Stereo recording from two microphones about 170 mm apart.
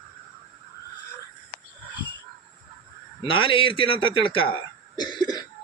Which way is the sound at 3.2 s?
30° left (ahead or behind).